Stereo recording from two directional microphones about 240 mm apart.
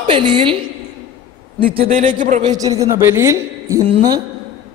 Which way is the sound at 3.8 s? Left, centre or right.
Right.